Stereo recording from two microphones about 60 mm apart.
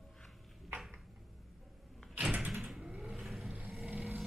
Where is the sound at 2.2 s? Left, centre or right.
Right.